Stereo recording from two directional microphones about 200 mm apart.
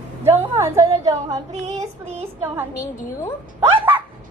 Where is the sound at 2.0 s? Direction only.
30° right (ahead or behind).